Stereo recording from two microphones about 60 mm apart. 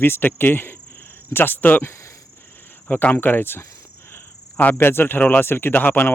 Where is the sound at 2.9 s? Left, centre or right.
Left.